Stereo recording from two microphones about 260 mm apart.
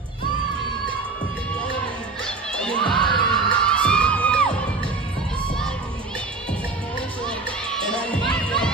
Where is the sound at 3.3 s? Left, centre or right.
Centre.